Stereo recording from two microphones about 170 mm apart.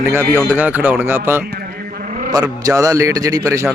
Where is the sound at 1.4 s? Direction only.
60° right (ahead or behind).